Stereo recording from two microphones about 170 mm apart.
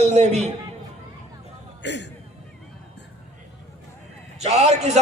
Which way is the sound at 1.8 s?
90° left.